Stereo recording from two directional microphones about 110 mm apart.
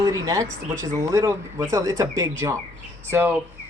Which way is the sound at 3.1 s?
20° right (ahead or behind).